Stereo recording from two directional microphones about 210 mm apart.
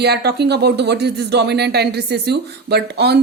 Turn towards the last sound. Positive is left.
turn(degrees=-50)  # may be behind; listen again after turning